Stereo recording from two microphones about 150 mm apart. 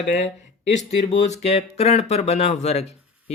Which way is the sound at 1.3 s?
45° left (ahead or behind).